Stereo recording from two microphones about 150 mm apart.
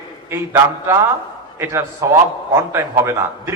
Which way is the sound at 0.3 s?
20° right (ahead or behind).